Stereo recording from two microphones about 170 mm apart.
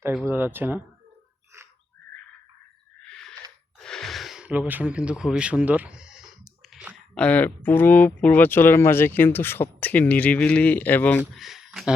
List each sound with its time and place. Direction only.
0.3 s speech: 10° right (ahead or behind)
3.1 s owl: 5° left (ahead or behind)
3.8 s speech: 5° left (ahead or behind)
11.2 s speech: centre (ahead or behind)